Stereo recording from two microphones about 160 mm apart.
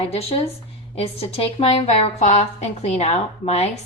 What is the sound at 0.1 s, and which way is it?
A woman's voice, 40° left (ahead or behind).